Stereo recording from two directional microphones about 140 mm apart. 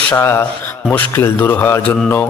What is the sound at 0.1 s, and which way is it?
A man's voice, 15° left (ahead or behind).